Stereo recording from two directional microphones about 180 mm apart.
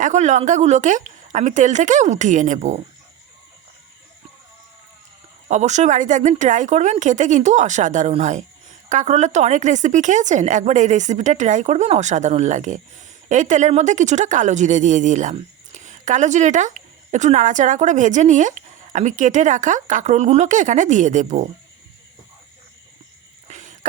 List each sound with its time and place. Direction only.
0.0 s a woman's voice: 40° right (ahead or behind)
5.5 s a woman's voice: 40° right (ahead or behind)
23.5 s wheeze: 40° right (ahead or behind)